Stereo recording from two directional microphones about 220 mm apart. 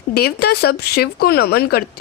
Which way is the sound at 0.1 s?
45° left (ahead or behind).